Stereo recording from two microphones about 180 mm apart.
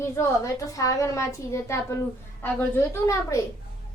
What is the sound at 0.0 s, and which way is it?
A woman's voice, 15° left (ahead or behind).